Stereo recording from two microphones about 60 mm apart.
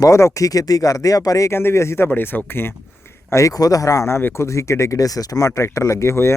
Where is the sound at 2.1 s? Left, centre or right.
Left.